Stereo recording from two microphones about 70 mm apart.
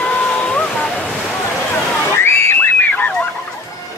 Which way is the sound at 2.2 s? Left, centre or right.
Left.